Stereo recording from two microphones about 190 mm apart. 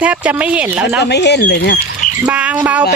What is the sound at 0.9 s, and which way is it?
Speech, 65° left (ahead or behind).